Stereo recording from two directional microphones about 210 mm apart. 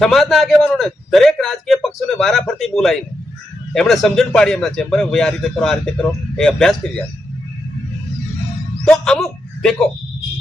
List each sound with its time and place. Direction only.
0.0 s a man's voice: centre (ahead or behind)
8.8 s speech: 5° left (ahead or behind)